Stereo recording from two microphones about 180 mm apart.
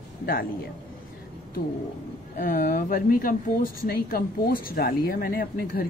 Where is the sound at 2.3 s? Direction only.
55° left (ahead or behind).